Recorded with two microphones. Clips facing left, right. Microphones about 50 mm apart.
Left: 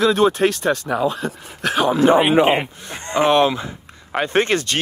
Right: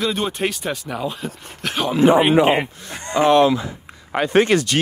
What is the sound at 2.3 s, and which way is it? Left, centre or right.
Speech, left.